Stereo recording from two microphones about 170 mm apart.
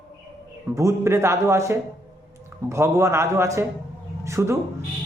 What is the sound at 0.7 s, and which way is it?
A man's voice, 15° right (ahead or behind).